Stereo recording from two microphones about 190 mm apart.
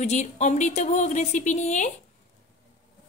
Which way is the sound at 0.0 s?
40° left (ahead or behind).